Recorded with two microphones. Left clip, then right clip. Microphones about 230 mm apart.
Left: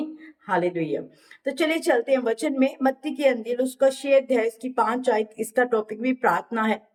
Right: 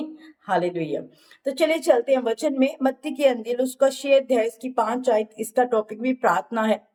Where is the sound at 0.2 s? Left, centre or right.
Centre.